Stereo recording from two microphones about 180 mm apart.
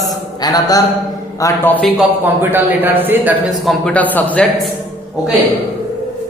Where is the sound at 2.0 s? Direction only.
10° right (ahead or behind).